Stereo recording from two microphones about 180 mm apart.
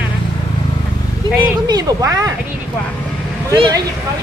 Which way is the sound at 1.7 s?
20° right (ahead or behind).